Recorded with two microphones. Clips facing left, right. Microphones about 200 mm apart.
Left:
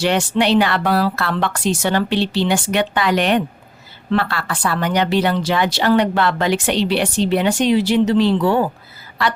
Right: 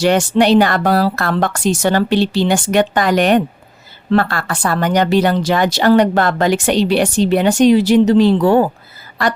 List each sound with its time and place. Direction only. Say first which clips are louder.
0.0 s a woman's voice: right 5 dB; 45° right (ahead or behind)